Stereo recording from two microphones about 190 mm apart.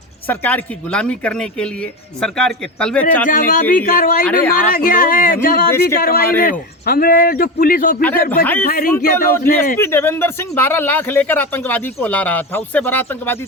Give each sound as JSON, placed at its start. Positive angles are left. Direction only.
{"t": 0.3, "sound": "speech", "side_deg": 10}
{"t": 3.2, "sound": "a man's voice", "side_deg": 45}
{"t": 8.9, "sound": "speech", "side_deg": 10}